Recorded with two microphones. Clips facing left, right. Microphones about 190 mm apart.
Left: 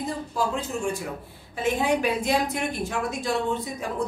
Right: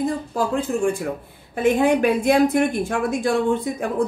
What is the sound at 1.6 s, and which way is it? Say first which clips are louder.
A woman's voice: right 7 dB; 55° right (ahead or behind).